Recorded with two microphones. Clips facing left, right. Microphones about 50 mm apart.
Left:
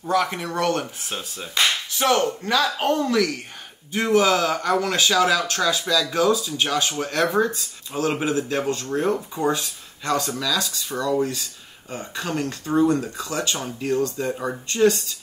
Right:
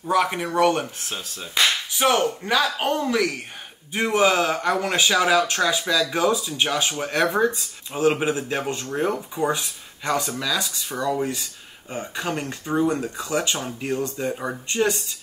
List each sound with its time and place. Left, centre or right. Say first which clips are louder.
0.1 s speech: right 1 dB; centre
1.0 s speech: left 1 dB; centre
1.5 s speech: right 1 dB; centre